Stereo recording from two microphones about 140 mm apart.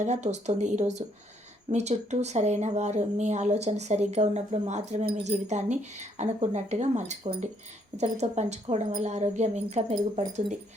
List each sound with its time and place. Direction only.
0.0 s speech: 55° right (ahead or behind)